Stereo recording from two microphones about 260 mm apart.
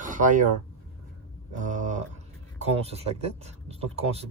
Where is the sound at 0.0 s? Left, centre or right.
Right.